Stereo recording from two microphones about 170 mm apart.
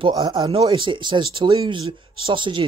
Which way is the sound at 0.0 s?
25° right (ahead or behind).